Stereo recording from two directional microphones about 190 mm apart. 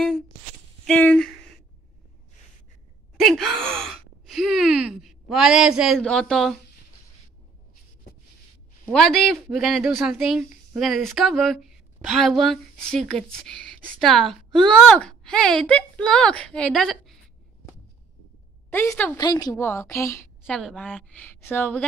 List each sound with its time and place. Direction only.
0.8 s speech: 5° left (ahead or behind)
3.2 s speech: centre (ahead or behind)
8.9 s speech: 5° left (ahead or behind)
18.7 s a woman's voice: 10° left (ahead or behind)
19.1 s a woman's voice: 20° left (ahead or behind)
20.4 s a woman's voice: 5° left (ahead or behind)